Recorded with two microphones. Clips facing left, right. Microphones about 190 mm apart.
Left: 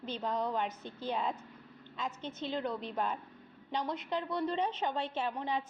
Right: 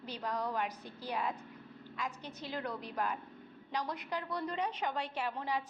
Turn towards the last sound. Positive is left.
turn(degrees=25)  # may be behind; listen again after turning